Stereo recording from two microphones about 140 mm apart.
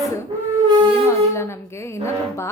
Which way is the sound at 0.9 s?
20° left (ahead or behind).